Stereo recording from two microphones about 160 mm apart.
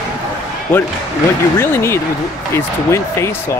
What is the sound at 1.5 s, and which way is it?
Speech, 15° left (ahead or behind).